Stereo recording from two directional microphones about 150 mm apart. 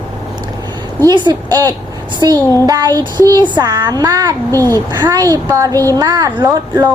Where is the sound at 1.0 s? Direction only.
30° right (ahead or behind).